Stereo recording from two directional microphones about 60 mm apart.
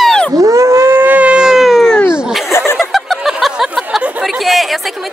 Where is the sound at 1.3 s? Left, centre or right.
Centre.